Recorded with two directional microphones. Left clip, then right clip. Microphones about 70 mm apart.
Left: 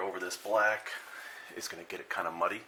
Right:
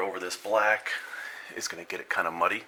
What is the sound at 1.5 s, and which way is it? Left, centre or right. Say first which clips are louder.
Speech: right 6 dB; right.